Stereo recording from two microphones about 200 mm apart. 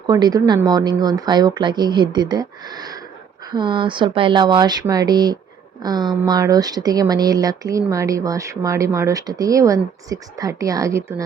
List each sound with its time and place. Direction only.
0.1 s speech: 20° right (ahead or behind)